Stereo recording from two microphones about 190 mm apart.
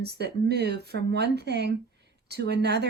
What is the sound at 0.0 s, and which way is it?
Speech, 60° right (ahead or behind).